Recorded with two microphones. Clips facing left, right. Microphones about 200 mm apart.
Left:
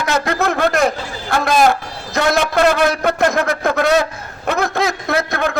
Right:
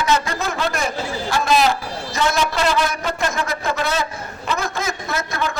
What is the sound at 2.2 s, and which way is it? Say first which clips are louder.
A man's voice: left 5 dB; 60° left (ahead or behind).